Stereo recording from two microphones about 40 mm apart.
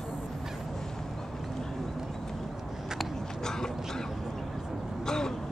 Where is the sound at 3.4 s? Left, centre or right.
Centre.